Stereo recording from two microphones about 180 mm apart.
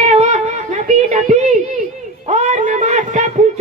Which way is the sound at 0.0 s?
40° right (ahead or behind).